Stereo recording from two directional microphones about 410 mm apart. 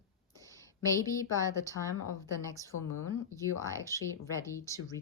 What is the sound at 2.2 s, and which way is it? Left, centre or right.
Speech, centre.